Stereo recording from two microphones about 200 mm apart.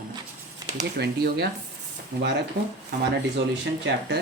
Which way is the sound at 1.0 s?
55° right (ahead or behind).